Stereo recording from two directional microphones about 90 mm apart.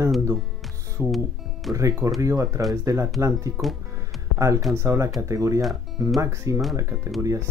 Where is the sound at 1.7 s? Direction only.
40° right (ahead or behind).